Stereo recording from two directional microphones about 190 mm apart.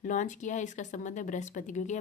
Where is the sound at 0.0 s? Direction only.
40° left (ahead or behind).